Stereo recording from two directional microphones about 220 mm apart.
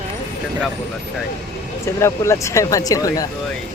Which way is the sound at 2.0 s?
15° left (ahead or behind).